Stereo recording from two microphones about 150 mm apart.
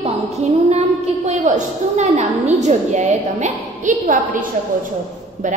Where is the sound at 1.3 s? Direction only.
50° right (ahead or behind).